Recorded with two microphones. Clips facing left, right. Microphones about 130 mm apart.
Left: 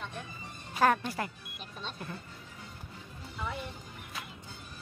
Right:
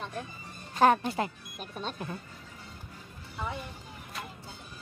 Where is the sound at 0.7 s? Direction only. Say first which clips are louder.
Right 4 dB; 25° right (ahead or behind).